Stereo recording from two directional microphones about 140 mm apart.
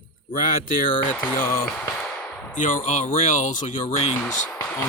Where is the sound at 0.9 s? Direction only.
70° left (ahead or behind).